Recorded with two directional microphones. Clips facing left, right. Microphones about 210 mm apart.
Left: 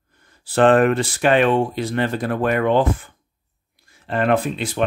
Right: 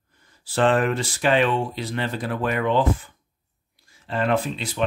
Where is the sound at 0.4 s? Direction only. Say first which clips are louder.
Left 6 dB; 55° left (ahead or behind).